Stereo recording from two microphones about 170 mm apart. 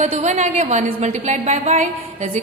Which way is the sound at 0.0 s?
40° right (ahead or behind).